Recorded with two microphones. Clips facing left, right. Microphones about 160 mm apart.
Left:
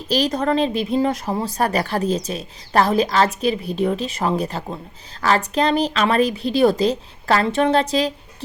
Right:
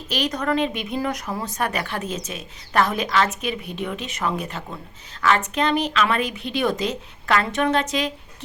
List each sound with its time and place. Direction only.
0.1 s speech: 30° left (ahead or behind)